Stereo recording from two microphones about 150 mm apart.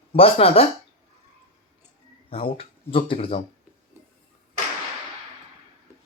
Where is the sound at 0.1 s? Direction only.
40° left (ahead or behind).